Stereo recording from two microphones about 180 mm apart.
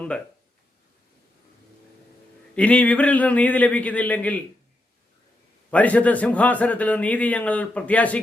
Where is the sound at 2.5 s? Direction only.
5° left (ahead or behind).